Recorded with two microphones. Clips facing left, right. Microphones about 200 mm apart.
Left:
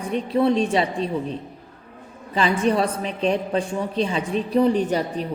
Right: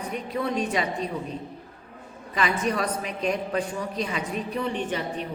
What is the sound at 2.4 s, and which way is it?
A woman's voice, 30° left (ahead or behind).